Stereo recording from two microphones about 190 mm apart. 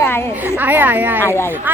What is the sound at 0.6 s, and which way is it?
Speech, 10° right (ahead or behind).